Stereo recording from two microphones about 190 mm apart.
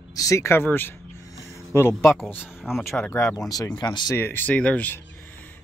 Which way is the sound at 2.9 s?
10° left (ahead or behind).